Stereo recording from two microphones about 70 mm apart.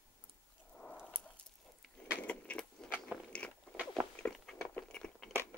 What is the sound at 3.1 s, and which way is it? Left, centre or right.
Biting, centre.